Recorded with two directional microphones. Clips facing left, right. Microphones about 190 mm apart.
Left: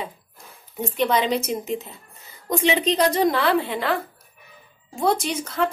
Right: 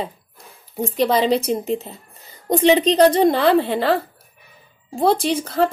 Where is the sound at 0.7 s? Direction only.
35° right (ahead or behind).